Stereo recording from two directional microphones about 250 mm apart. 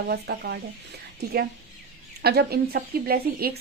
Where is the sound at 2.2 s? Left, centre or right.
Right.